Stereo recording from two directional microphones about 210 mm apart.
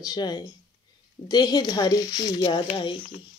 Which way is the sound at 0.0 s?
20° left (ahead or behind).